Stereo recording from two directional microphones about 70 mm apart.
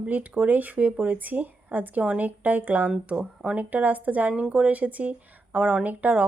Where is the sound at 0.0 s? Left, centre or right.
Right.